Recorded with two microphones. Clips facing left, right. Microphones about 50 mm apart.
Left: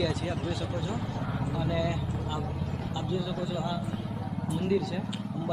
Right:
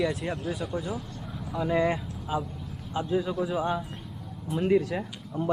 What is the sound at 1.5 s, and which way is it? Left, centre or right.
Speech, right.